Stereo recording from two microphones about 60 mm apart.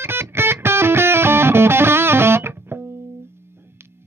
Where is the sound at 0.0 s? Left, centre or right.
Right.